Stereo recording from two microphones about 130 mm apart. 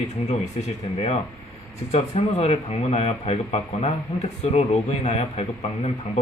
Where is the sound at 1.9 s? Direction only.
55° left (ahead or behind).